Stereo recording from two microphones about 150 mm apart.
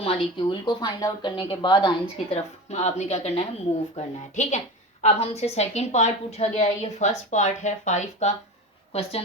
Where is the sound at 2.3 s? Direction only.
45° left (ahead or behind).